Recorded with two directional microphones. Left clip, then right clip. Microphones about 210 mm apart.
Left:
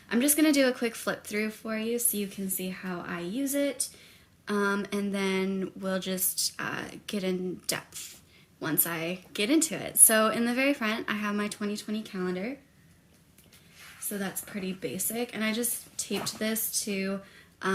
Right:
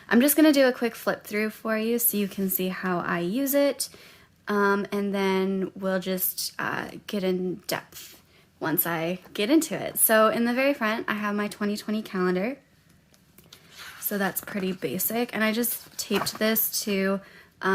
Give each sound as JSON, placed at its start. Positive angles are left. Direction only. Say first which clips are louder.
{"t": 0.1, "sound": "speech", "louder": "right 5 dB", "side_deg": -30}
{"t": 4.4, "sound": "a woman's voice", "louder": "right 5 dB", "side_deg": -20}
{"t": 14.1, "sound": "a woman's voice", "louder": "right 8 dB", "side_deg": -30}
{"t": 17.6, "sound": "duck", "louder": "right 5 dB", "side_deg": -20}